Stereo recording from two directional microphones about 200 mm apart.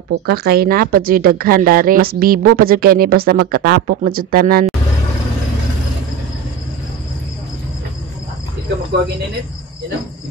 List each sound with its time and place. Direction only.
0.3 s a woman's voice: 50° right (ahead or behind)